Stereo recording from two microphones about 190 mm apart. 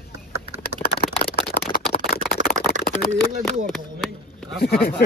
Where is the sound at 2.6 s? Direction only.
40° right (ahead or behind).